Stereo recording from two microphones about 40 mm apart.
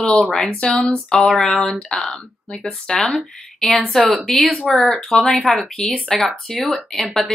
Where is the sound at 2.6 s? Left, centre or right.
Centre.